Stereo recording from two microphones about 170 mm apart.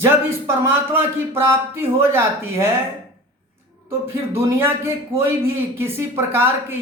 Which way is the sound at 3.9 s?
15° right (ahead or behind).